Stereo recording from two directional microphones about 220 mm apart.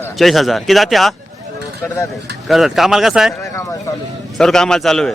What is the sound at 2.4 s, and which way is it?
Speech, centre (ahead or behind).